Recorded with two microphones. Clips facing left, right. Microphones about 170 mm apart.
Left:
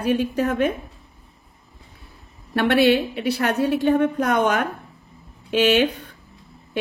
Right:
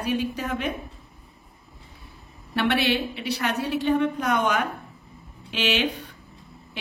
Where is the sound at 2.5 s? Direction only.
50° left (ahead or behind).